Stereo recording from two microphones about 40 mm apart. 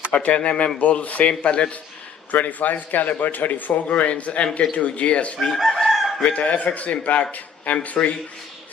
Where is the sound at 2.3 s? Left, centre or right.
Left.